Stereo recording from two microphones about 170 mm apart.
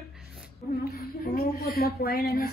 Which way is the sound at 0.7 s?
65° left (ahead or behind).